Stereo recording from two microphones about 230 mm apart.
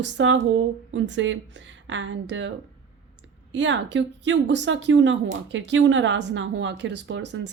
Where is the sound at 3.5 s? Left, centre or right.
Right.